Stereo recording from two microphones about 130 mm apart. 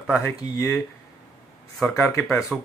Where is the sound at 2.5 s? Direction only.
5° right (ahead or behind).